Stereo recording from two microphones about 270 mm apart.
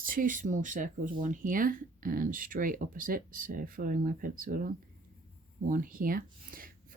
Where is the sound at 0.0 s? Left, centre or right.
Right.